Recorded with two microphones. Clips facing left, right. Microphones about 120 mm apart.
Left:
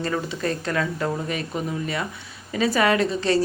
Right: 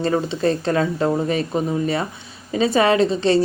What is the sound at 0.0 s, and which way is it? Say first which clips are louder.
Speech: right 6 dB; 25° right (ahead or behind).